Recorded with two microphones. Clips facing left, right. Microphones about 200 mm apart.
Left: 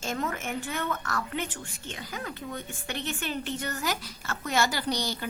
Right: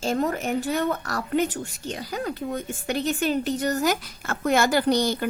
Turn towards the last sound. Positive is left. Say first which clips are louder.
# right 10 dB
turn(degrees=-50)  # may be behind; listen again after turning